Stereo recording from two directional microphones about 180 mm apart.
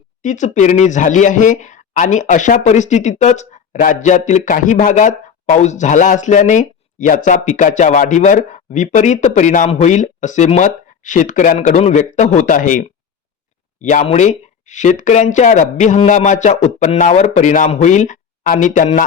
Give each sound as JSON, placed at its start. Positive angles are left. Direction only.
{"t": 0.2, "sound": "speech", "side_deg": 45}
{"t": 13.8, "sound": "speech", "side_deg": 40}